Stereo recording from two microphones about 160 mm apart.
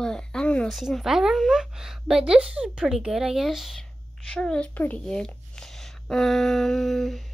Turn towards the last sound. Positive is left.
turn(degrees=0)  # may be behind; listen again after turning